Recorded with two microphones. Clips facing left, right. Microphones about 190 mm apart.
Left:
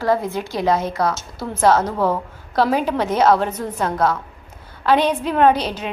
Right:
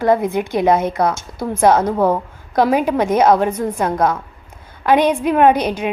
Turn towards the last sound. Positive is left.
turn(degrees=-15)  # may be behind; listen again after turning